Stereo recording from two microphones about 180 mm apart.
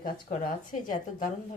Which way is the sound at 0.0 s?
50° left (ahead or behind).